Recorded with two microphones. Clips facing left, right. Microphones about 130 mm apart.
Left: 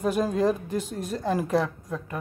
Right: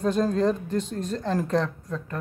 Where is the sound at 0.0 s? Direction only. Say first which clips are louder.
Right 1 dB; 10° left (ahead or behind).